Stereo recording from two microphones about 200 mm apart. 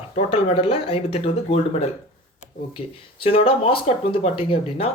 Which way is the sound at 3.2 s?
30° left (ahead or behind).